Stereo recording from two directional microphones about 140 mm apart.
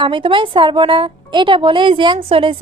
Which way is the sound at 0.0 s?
35° right (ahead or behind).